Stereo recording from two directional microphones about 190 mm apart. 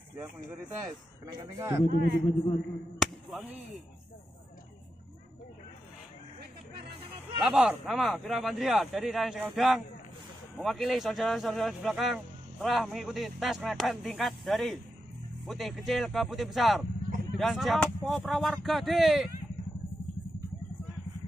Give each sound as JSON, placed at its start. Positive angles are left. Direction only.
{"t": 1.4, "sound": "speech", "side_deg": -15}
{"t": 1.9, "sound": "speech", "side_deg": -55}
{"t": 2.2, "sound": "a man's voice", "side_deg": 25}
{"t": 3.0, "sound": "a sound", "side_deg": 0}
{"t": 7.4, "sound": "speech", "side_deg": -5}